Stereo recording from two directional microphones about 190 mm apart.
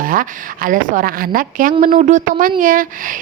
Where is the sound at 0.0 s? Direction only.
45° right (ahead or behind).